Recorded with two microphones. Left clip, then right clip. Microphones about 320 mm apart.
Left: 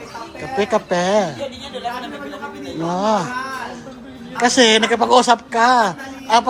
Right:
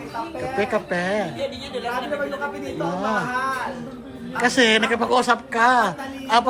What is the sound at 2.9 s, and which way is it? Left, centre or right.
Speech, centre.